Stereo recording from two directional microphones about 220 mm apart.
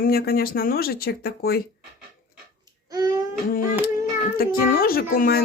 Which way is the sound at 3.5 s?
40° left (ahead or behind).